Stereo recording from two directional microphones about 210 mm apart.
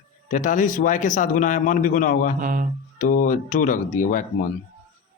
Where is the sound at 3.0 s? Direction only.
40° left (ahead or behind).